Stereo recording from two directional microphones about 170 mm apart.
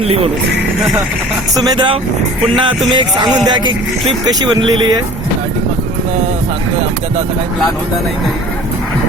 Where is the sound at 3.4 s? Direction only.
25° right (ahead or behind).